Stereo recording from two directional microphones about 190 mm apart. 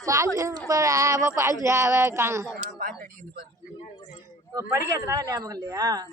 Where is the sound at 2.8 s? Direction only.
50° right (ahead or behind).